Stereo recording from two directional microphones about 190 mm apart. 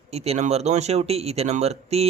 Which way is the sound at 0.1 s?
35° right (ahead or behind).